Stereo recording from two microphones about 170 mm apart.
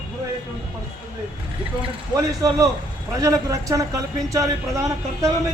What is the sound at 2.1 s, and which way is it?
Speech, 20° right (ahead or behind).